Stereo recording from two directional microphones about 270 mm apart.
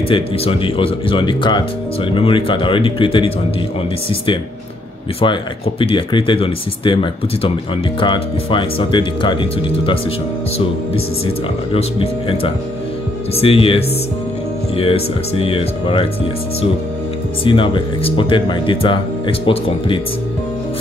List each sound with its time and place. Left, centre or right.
0.1 s speech: centre
5.2 s speech: centre
11.7 s speech: left
17.5 s speech: centre